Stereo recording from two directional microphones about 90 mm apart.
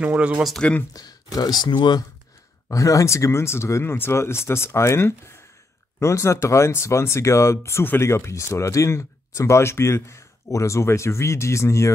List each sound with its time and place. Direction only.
0.0 s speech: 15° right (ahead or behind)
0.6 s speech: 15° left (ahead or behind)
0.9 s speech: 45° left (ahead or behind)
2.7 s speech: 35° left (ahead or behind)